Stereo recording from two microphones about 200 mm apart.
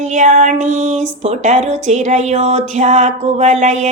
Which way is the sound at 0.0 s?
35° right (ahead or behind).